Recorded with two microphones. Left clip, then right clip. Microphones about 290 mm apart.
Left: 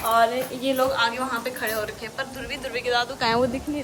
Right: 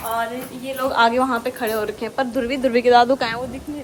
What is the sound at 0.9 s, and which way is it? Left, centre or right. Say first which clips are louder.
Speech: right 7 dB; centre.